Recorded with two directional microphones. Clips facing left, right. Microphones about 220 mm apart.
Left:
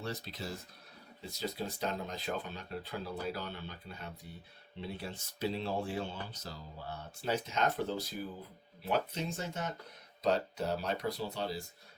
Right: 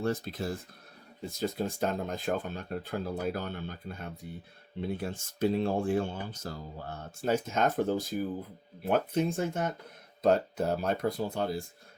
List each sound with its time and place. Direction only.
0.0 s speech: 50° right (ahead or behind)